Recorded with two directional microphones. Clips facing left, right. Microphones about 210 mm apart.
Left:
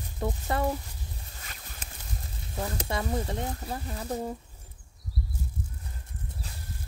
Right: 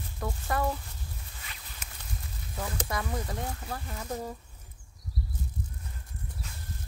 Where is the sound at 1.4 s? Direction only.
45° left (ahead or behind).